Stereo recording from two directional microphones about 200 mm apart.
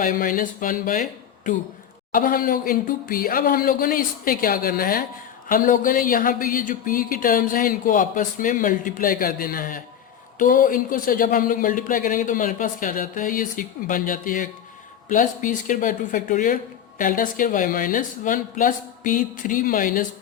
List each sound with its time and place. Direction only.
0.0 s speech: 45° left (ahead or behind)
2.1 s speech: 45° left (ahead or behind)